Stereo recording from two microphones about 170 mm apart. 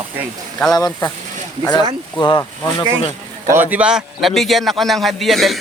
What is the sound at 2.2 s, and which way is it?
Speech, 30° left (ahead or behind).